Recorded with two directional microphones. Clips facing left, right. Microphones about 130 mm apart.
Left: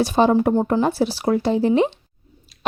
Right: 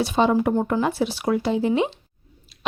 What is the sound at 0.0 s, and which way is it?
A woman's voice, 40° left (ahead or behind).